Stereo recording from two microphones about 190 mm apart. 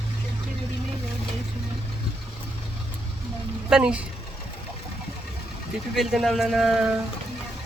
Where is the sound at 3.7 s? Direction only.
5° right (ahead or behind).